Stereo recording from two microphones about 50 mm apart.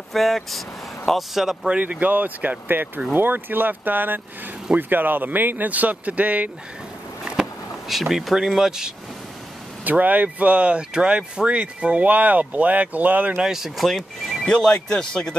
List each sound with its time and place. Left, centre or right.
0.1 s speech: centre
1.7 s speech: right
2.7 s speech: right
7.9 s speech: centre
9.8 s speech: right
13.4 s speech: centre
14.4 s speech: centre